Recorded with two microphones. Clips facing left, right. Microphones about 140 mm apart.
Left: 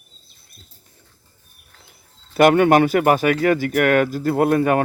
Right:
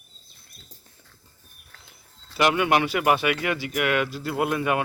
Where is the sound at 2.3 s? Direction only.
50° left (ahead or behind).